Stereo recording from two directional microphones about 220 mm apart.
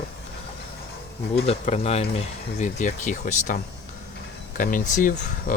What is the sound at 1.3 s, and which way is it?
Speech, 30° left (ahead or behind).